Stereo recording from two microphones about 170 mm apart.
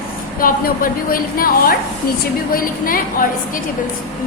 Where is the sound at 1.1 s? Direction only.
60° left (ahead or behind).